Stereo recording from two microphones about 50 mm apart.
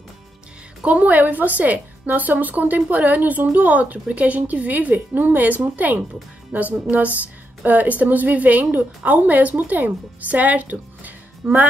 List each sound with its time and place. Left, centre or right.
0.8 s a woman's voice: right